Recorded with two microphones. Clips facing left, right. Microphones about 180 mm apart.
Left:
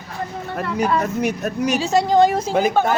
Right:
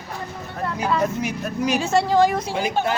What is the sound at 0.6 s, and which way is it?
Speech, 65° left (ahead or behind).